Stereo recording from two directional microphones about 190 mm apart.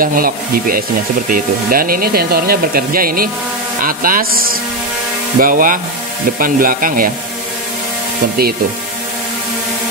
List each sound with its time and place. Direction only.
0.0 s speech: 50° right (ahead or behind)